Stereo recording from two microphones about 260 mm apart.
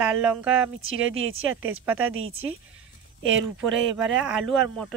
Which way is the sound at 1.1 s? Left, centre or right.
Right.